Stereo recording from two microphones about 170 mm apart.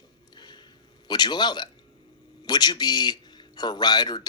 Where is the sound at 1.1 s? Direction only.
25° left (ahead or behind).